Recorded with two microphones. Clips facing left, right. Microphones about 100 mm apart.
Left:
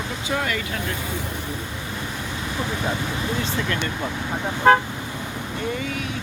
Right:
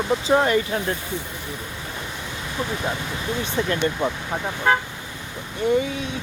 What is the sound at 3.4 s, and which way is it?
Speech, 25° right (ahead or behind).